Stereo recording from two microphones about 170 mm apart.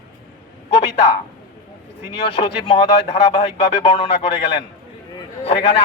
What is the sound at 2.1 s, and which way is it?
Speech, 30° left (ahead or behind).